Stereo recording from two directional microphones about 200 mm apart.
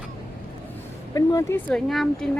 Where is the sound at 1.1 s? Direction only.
15° left (ahead or behind).